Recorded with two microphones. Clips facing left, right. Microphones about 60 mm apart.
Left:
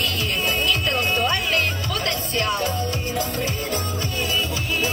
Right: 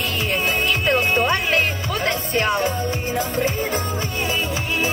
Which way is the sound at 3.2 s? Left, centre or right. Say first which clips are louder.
Right 6 dB; right.